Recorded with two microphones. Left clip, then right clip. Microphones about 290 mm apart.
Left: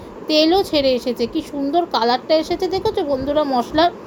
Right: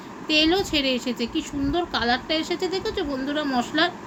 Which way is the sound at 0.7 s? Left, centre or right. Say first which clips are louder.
Left 7 dB; centre.